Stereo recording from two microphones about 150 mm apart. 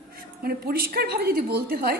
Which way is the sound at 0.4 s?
90° right.